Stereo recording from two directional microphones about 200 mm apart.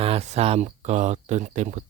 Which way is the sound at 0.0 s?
30° right (ahead or behind).